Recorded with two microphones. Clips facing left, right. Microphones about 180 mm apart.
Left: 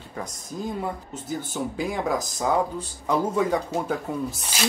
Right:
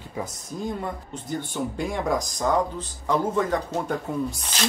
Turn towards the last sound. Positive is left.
turn(degrees=5)  # may be behind; listen again after turning